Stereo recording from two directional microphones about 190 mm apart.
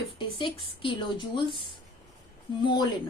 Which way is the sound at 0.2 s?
25° left (ahead or behind).